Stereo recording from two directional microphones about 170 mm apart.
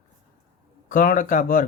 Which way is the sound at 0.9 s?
50° left (ahead or behind).